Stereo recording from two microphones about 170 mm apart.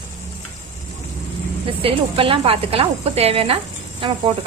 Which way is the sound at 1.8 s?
30° right (ahead or behind).